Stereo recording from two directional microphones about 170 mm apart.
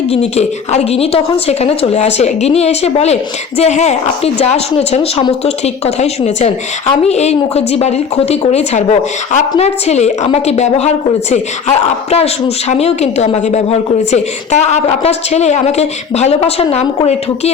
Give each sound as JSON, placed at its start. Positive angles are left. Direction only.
{"t": 0.1, "sound": "a woman's voice", "side_deg": 40}